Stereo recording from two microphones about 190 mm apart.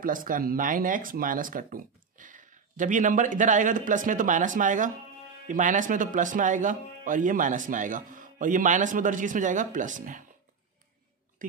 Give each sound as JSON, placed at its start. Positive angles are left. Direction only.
{"t": 0.0, "sound": "speech", "side_deg": -45}